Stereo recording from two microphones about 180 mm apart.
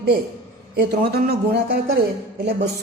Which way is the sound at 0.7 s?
60° right (ahead or behind).